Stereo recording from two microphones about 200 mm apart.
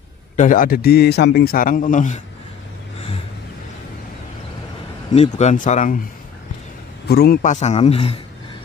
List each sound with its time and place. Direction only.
0.4 s a man's voice: 45° left (ahead or behind)
5.1 s speech: 30° left (ahead or behind)
7.1 s a man's voice: 55° left (ahead or behind)
7.4 s speech: 35° left (ahead or behind)